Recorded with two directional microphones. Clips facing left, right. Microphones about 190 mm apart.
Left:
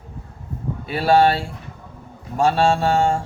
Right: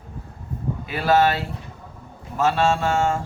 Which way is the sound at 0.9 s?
30° left (ahead or behind).